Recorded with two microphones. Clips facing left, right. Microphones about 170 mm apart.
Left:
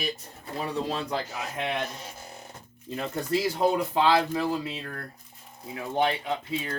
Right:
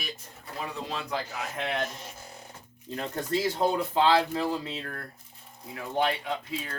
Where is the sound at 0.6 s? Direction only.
35° left (ahead or behind).